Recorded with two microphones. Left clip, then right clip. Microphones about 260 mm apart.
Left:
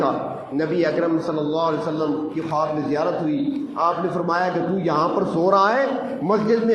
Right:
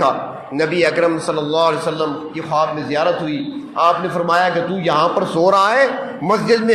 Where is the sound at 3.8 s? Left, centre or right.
Right.